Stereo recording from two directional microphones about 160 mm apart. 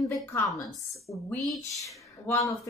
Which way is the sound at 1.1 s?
20° left (ahead or behind).